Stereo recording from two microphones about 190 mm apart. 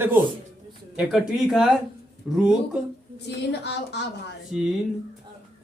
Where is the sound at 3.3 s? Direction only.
60° left (ahead or behind).